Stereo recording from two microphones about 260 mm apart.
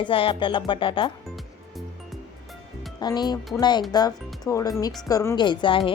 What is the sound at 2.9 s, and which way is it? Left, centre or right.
Speech, centre.